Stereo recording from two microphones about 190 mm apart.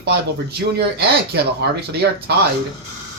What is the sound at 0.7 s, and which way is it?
Speech, 60° right (ahead or behind).